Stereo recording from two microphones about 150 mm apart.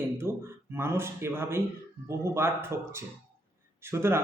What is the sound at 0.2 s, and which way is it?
A man's voice, 15° right (ahead or behind).